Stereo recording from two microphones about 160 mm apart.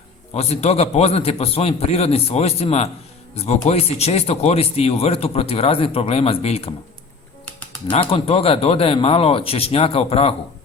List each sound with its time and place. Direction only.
0.3 s speech: 40° left (ahead or behind)
8.1 s speech: 35° left (ahead or behind)